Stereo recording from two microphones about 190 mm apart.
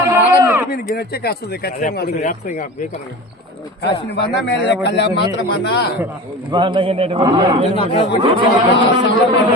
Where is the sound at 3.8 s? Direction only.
60° left (ahead or behind).